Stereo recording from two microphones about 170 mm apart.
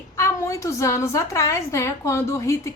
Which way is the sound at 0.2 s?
15° left (ahead or behind).